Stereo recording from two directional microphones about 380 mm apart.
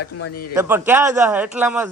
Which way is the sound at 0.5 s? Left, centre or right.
Centre.